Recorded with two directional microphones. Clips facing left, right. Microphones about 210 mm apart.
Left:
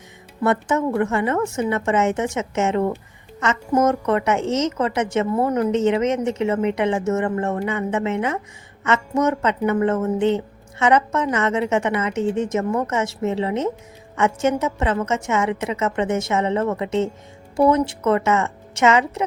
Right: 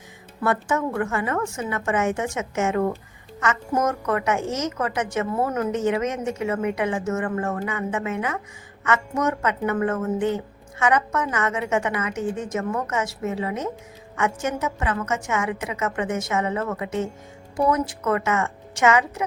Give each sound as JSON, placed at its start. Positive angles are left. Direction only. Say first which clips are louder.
{"t": 0.4, "sound": "a woman's voice", "louder": "left 4 dB", "side_deg": 20}